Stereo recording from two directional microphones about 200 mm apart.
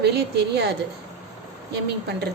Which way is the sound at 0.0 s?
55° right (ahead or behind).